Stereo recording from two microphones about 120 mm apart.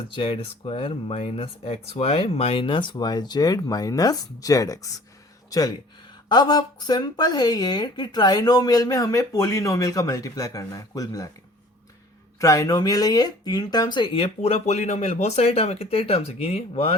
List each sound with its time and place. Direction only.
0.1 s a woman's voice: 45° left (ahead or behind); by 11.3 s 30° left (ahead or behind)
12.4 s speech: 30° left (ahead or behind); by 16.9 s 60° left (ahead or behind)